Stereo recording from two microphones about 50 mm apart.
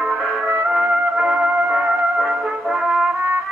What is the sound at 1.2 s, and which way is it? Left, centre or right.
Music, right.